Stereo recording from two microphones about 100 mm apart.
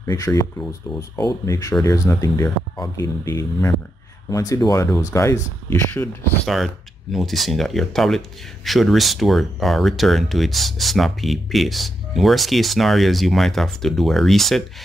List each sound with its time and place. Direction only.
0.0 s speech: 30° left (ahead or behind)
6.4 s speech: centre (ahead or behind)